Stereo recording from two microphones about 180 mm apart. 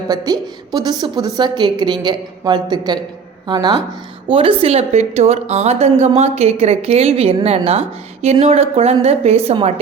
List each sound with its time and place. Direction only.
0.1 s a woman's voice: 20° right (ahead or behind)